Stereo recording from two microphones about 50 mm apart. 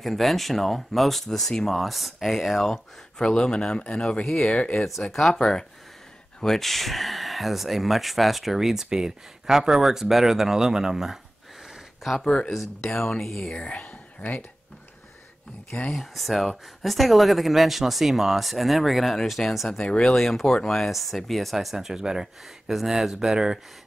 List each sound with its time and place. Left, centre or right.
0.0 s speech: centre
1.8 s speech: centre; by 4.7 s left
4.8 s speech: centre
12.3 s speech: centre
12.5 s speech: centre
13.6 s speech: left
15.9 s speech: centre
19.8 s speech: centre